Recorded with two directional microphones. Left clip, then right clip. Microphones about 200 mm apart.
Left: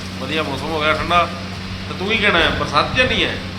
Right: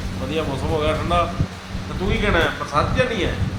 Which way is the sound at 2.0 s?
35° left (ahead or behind).